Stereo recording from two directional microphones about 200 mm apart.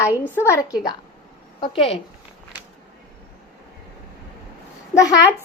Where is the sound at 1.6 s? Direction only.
25° left (ahead or behind).